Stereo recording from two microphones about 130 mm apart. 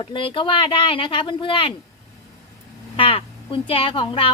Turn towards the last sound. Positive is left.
turn(degrees=40)  # may be behind; listen again after turning